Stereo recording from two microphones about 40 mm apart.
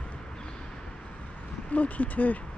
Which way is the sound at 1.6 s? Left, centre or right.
Left.